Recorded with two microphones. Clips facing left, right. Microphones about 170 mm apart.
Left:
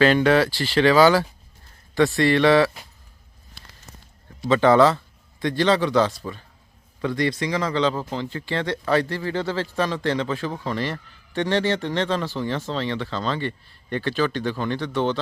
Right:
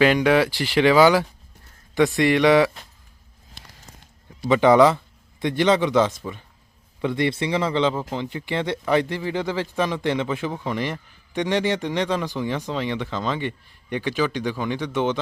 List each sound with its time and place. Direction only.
0.0 s speech: 15° right (ahead or behind)
4.4 s a man's voice: 15° right (ahead or behind)